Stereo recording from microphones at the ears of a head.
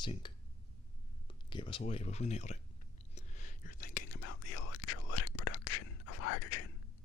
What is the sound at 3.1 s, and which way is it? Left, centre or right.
Whispering, left.